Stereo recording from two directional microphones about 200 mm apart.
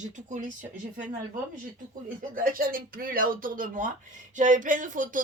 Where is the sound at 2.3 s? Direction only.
45° right (ahead or behind).